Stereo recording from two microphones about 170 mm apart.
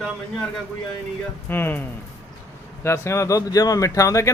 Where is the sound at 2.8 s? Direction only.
15° left (ahead or behind).